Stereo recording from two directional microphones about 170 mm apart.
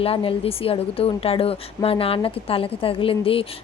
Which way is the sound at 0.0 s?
35° left (ahead or behind).